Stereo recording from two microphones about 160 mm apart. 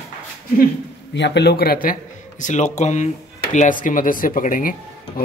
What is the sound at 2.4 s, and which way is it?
Speech, 50° left (ahead or behind).